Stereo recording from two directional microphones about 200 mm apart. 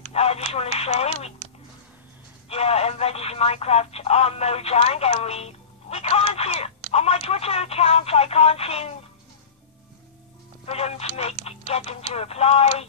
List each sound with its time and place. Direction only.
0.1 s a sound: 30° left (ahead or behind)
0.7 s speech: 30° left (ahead or behind)
2.5 s speech: 30° left (ahead or behind)
10.6 s speech: 30° left (ahead or behind)